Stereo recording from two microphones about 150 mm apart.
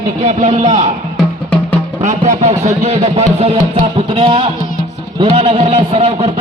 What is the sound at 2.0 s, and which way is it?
A man's voice, 50° right (ahead or behind).